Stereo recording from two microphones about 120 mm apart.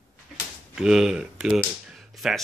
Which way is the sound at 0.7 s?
5° right (ahead or behind).